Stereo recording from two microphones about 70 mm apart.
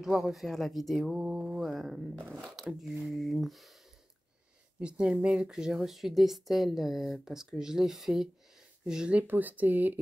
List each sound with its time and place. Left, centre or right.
0.0 s speech: centre
4.7 s speech: centre
9.3 s speech: right